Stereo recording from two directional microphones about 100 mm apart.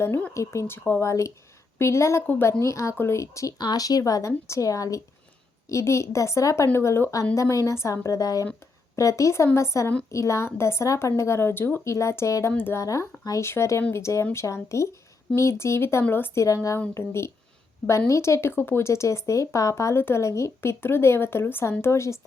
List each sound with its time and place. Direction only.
0.3 s speech: 25° left (ahead or behind)
3.6 s a woman's voice: 40° left (ahead or behind)